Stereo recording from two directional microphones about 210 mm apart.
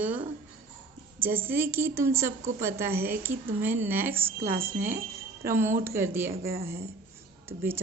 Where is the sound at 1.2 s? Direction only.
10° right (ahead or behind).